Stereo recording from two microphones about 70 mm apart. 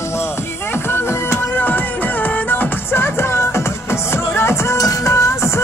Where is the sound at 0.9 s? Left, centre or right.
Left.